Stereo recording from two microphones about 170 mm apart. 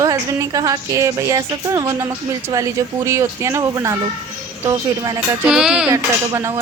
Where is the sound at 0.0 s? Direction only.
20° right (ahead or behind).